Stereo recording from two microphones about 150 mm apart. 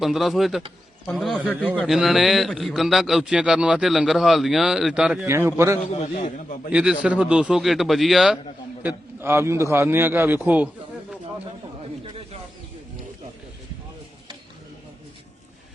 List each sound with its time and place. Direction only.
0.0 s a man's voice: centre (ahead or behind)
5.5 s a man's voice: 15° right (ahead or behind)
5.8 s a man's voice: 45° left (ahead or behind)
6.7 s a man's voice: 10° right (ahead or behind)
8.8 s a man's voice: 15° right (ahead or behind)
12.0 s snake: 40° right (ahead or behind)